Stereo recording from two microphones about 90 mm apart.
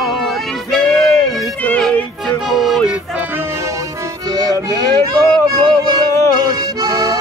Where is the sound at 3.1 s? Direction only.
20° right (ahead or behind); by 4.6 s 45° right (ahead or behind).